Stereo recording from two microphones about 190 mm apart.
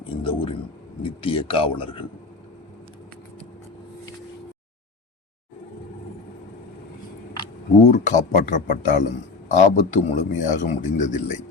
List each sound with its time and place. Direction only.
0.2 s speech: 30° left (ahead or behind)
7.9 s speech: 40° left (ahead or behind)